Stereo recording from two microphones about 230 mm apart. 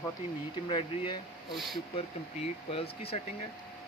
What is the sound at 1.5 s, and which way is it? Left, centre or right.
Speech, centre.